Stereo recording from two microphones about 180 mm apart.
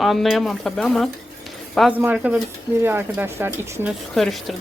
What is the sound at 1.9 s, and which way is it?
Speech, 10° right (ahead or behind).